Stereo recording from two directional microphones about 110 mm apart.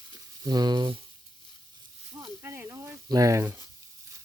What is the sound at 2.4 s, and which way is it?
Snake, 20° right (ahead or behind).